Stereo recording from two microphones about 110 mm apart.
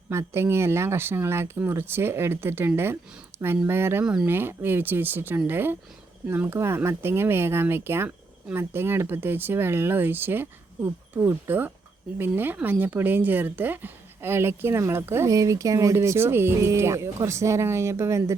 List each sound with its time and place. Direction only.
0.1 s speech: 25° right (ahead or behind)
4.0 s speech: 10° right (ahead or behind)
4.3 s speech: 20° right (ahead or behind)